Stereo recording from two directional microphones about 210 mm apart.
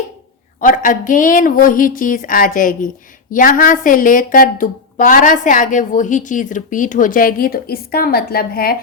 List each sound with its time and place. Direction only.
0.6 s a woman's voice: 40° left (ahead or behind)